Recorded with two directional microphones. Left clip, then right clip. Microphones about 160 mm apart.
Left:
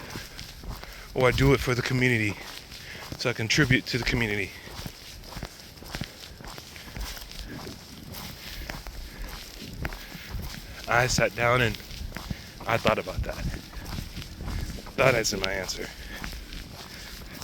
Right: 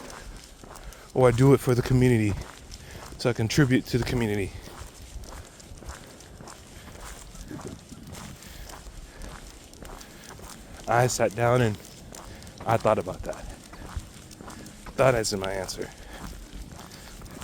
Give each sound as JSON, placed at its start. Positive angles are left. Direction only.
{"t": 1.1, "sound": "speech", "side_deg": -80}
{"t": 10.8, "sound": "speech", "side_deg": -90}
{"t": 14.9, "sound": "speech", "side_deg": -70}